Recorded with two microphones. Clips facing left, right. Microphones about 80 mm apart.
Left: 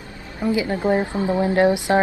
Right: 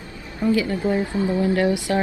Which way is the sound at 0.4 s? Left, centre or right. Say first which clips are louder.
Right 1 dB; centre.